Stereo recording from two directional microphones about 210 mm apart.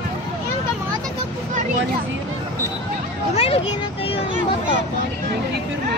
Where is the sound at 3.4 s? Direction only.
30° left (ahead or behind).